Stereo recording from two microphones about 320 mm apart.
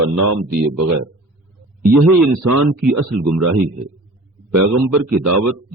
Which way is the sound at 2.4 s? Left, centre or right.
Right.